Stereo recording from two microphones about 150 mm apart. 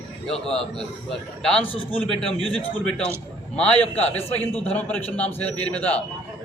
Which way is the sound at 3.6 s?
5° left (ahead or behind).